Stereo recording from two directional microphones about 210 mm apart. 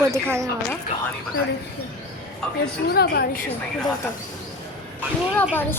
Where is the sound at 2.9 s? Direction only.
50° left (ahead or behind).